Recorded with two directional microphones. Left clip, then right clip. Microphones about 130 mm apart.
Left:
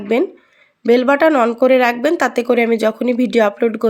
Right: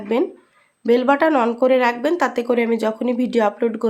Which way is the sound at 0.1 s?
25° left (ahead or behind).